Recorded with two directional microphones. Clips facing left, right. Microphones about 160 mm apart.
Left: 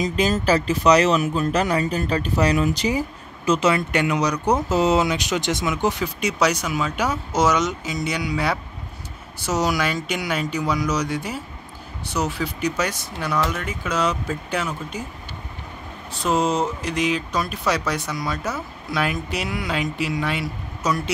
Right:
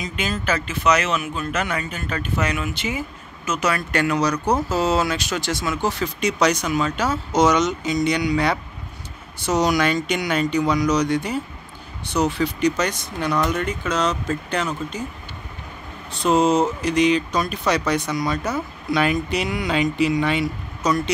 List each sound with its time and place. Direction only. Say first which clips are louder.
0.0 s speech: left 6 dB; 35° left (ahead or behind); by 15.0 s 10° left (ahead or behind)
16.1 s speech: right 4 dB; 5° left (ahead or behind)